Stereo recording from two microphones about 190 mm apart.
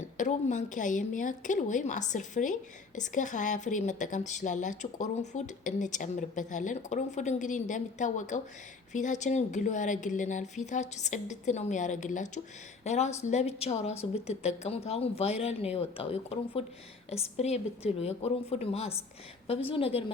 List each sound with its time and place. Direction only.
0.0 s a woman's voice: 40° left (ahead or behind)